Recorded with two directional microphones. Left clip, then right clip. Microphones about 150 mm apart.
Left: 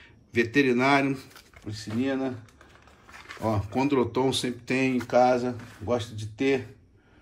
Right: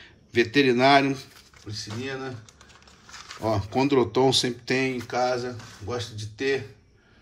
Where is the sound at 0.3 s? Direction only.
5° right (ahead or behind).